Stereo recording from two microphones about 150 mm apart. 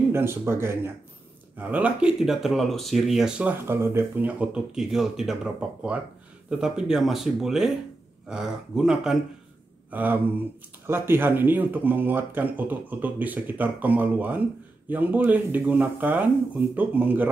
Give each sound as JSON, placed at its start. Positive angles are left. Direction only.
{"t": 0.1, "sound": "speech", "side_deg": -15}